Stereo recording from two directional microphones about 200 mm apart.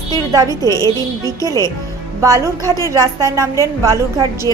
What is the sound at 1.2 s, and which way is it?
Speech, 15° left (ahead or behind).